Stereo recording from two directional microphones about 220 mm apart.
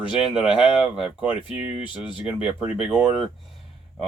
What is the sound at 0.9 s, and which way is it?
Speech, 5° right (ahead or behind).